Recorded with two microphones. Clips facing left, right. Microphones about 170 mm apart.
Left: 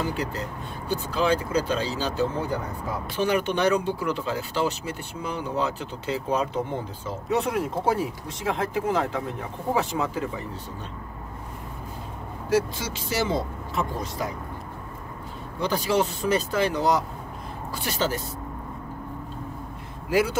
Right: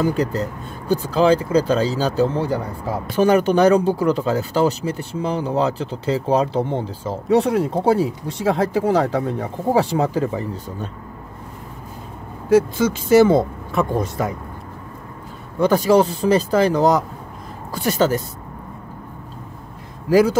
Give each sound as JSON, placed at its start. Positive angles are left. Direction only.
{"t": 0.0, "sound": "speech", "side_deg": -40}
{"t": 12.4, "sound": "speech", "side_deg": -55}
{"t": 15.6, "sound": "speech", "side_deg": -45}
{"t": 20.1, "sound": "speech", "side_deg": -40}